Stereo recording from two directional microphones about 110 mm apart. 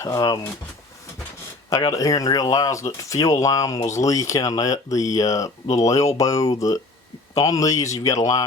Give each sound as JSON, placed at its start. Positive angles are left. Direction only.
{"t": 0.0, "sound": "speech", "side_deg": 30}
{"t": 1.7, "sound": "speech", "side_deg": 30}